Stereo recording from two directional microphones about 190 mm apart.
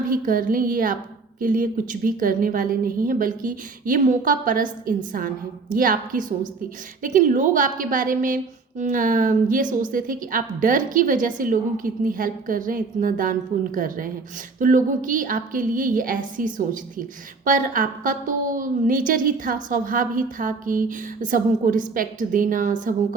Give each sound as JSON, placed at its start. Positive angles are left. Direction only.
{"t": 0.1, "sound": "a woman's voice", "side_deg": -45}